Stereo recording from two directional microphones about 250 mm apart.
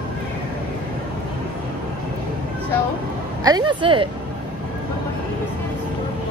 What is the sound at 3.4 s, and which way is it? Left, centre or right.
Speech, centre.